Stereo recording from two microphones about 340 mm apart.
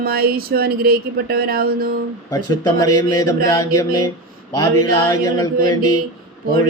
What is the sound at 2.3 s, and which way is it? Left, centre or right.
Speech, centre.